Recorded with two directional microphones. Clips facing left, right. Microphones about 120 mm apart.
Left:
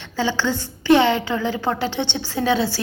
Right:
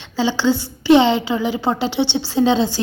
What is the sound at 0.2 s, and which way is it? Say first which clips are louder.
A woman's voice: right 4 dB; 15° right (ahead or behind).